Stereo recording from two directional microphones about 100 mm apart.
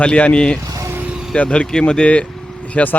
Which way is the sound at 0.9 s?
10° right (ahead or behind).